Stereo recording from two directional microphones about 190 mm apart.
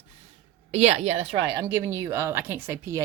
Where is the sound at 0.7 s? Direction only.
35° right (ahead or behind).